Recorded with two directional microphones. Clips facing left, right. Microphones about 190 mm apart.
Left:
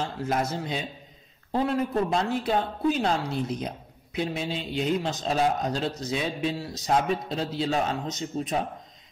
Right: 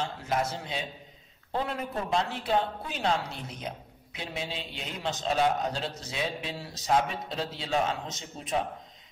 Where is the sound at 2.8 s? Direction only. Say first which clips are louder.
Left 6 dB; 40° left (ahead or behind).